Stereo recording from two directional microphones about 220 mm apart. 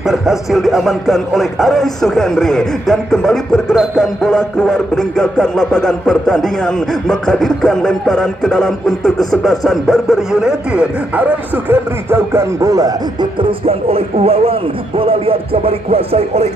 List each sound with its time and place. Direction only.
0.0 s a man's voice: centre (ahead or behind); by 16.4 s 25° right (ahead or behind)